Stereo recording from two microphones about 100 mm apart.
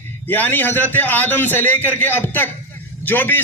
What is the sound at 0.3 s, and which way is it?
A man's voice, 20° left (ahead or behind).